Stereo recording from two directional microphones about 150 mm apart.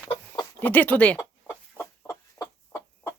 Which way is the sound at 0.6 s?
10° left (ahead or behind).